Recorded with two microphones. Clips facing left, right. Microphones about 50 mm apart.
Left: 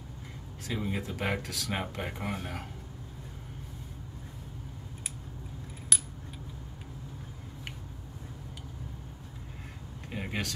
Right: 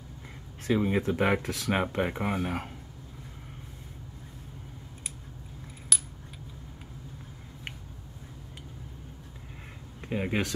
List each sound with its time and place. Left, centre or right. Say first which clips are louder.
0.7 s speech: right 8 dB; right
5.9 s coin: even; centre
10.0 s speech: right 6 dB; right